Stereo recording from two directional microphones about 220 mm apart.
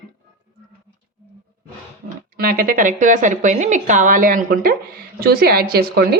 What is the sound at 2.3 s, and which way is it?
A woman's voice, 40° right (ahead or behind).